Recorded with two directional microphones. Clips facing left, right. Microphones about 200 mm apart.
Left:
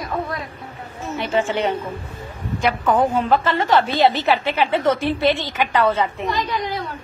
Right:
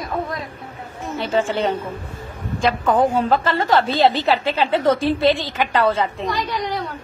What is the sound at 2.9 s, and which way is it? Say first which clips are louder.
Speech: right 1 dB; 15° right (ahead or behind).